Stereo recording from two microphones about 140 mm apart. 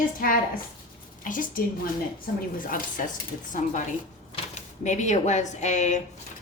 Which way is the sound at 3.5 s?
60° left (ahead or behind).